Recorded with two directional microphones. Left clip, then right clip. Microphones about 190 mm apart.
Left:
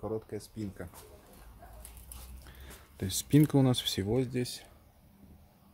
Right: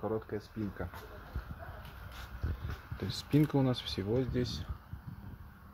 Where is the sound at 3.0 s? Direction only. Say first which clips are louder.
Left 4 dB; 35° left (ahead or behind).